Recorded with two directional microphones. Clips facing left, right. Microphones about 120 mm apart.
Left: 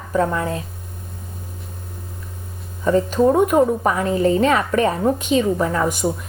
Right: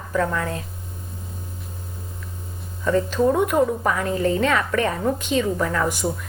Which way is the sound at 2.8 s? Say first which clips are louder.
Left 3 dB; 20° left (ahead or behind).